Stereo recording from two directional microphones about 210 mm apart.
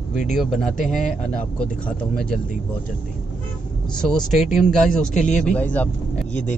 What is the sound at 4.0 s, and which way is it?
Speech, centre (ahead or behind).